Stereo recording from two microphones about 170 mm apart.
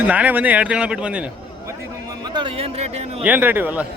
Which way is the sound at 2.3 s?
30° right (ahead or behind).